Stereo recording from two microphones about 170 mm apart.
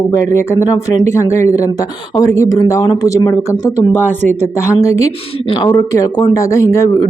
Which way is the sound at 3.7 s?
45° right (ahead or behind).